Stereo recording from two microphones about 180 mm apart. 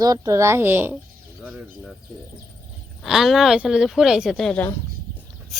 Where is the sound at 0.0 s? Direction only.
20° right (ahead or behind); by 1.9 s centre (ahead or behind).